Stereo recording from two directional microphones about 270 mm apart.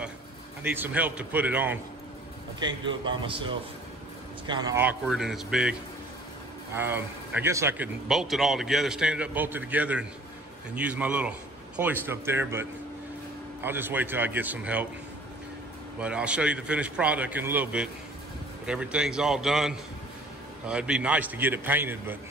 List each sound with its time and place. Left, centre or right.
0.7 s speech: centre
2.6 s a man's voice: centre
16.0 s speech: centre